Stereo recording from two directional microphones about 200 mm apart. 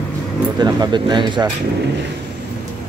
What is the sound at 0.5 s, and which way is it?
Speech, 20° right (ahead or behind).